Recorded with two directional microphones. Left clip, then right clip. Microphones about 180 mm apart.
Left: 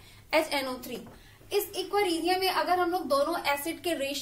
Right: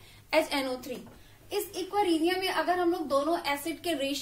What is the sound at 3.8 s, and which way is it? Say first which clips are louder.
Speech: even; 25° right (ahead or behind).